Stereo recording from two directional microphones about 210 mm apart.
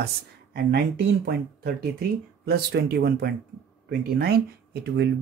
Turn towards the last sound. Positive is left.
turn(degrees=-50)  # may be behind; listen again after turning